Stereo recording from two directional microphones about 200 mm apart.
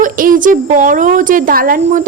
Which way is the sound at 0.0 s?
45° right (ahead or behind).